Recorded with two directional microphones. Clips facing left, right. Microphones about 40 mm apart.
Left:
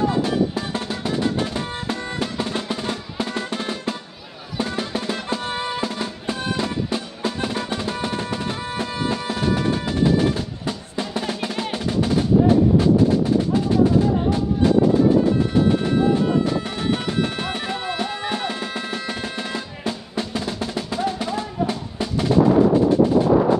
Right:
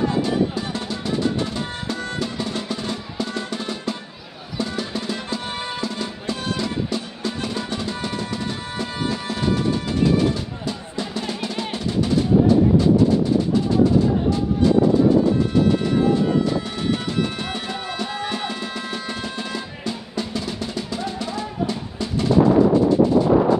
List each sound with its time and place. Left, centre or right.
0.2 s drum: left
4.6 s music: left
16.9 s music: left
19.8 s drum: left